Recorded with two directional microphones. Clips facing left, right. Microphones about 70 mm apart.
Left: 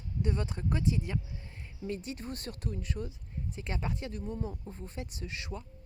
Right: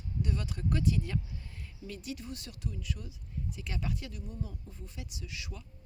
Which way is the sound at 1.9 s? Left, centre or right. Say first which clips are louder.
Left 3 dB; left.